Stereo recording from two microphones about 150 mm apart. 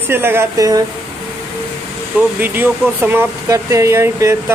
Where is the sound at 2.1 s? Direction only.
10° right (ahead or behind).